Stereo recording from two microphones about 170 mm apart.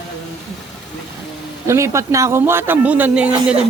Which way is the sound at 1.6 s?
15° right (ahead or behind).